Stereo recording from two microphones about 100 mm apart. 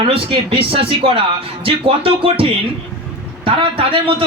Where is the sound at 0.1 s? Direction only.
65° right (ahead or behind).